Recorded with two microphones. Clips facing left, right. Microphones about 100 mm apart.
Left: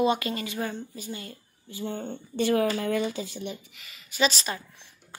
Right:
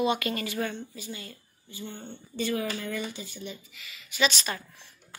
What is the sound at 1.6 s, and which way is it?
Speech, 90° left.